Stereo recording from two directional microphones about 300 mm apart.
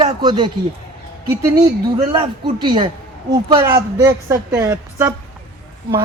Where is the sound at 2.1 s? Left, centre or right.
Centre.